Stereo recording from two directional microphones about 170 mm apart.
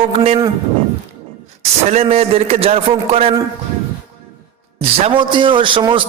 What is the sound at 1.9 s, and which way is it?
A man's voice, 35° right (ahead or behind).